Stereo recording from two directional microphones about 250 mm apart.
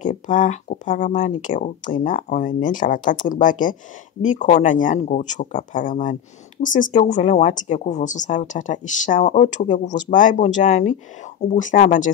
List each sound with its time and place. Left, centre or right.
0.0 s a woman's voice: left